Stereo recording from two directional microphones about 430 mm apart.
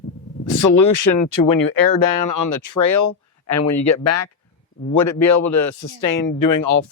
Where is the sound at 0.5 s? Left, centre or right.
Left.